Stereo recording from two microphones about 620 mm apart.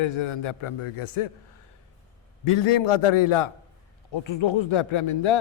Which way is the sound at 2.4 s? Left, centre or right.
Left.